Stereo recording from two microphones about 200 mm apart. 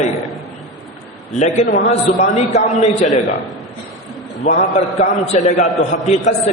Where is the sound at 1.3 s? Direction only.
35° left (ahead or behind).